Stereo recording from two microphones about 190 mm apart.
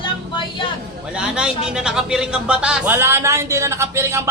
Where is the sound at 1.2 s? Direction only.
5° right (ahead or behind).